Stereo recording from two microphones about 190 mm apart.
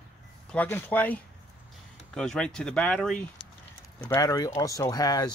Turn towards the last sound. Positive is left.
turn(degrees=20)  # may be behind; listen again after turning